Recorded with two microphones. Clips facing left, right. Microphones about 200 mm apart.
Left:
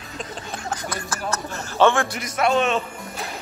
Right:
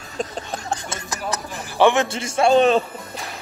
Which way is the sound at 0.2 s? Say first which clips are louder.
Right 5 dB; 30° right (ahead or behind).